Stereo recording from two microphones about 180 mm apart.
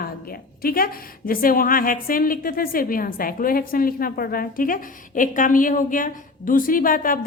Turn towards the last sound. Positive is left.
turn(degrees=50)  # may be behind; listen again after turning